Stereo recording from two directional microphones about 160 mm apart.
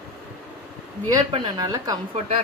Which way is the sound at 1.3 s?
25° right (ahead or behind).